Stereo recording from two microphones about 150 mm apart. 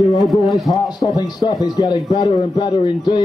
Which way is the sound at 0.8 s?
25° left (ahead or behind).